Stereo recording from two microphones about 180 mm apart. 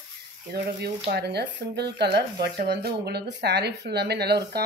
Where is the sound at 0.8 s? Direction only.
65° right (ahead or behind).